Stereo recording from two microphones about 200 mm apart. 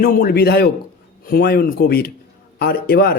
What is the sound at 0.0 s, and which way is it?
Speech, 45° left (ahead or behind).